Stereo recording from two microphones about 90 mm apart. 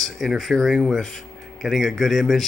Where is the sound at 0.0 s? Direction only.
Centre (ahead or behind).